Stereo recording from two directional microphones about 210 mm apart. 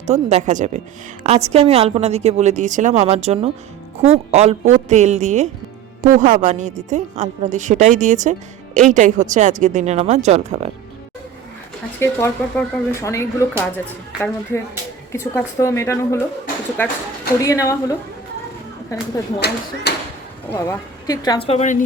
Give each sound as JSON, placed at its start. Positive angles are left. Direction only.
{"t": 0.1, "sound": "a woman's voice", "side_deg": -30}
{"t": 11.9, "sound": "speech", "side_deg": 10}
{"t": 17.4, "sound": "speech", "side_deg": 15}
{"t": 19.4, "sound": "speech", "side_deg": 50}
{"t": 20.5, "sound": "speech", "side_deg": 15}